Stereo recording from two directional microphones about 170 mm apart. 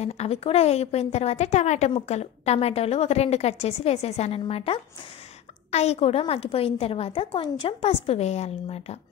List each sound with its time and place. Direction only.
0.0 s a woman's voice: 40° left (ahead or behind)